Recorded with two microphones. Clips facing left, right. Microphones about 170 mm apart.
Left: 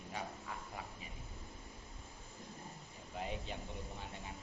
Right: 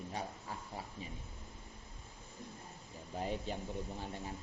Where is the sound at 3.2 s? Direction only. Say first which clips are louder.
Right 4 dB; 35° right (ahead or behind).